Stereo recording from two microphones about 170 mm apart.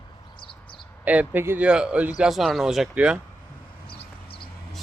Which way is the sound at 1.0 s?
10° right (ahead or behind).